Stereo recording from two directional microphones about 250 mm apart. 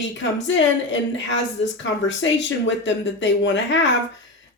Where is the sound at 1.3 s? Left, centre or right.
Left.